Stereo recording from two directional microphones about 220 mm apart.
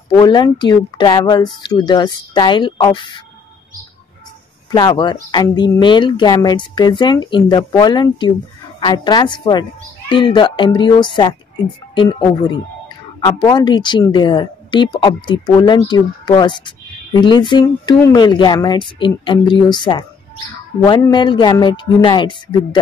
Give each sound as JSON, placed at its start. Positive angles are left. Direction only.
{"t": 0.2, "sound": "speech", "side_deg": 20}
{"t": 4.6, "sound": "speech", "side_deg": 20}